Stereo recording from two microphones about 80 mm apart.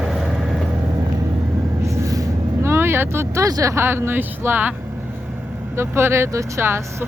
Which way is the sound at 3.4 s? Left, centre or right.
Right.